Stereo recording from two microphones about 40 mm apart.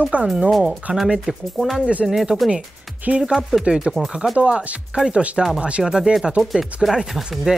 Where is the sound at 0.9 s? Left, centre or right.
Right.